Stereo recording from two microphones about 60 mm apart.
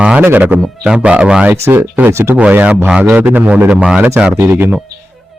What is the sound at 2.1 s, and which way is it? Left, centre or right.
Speech, right.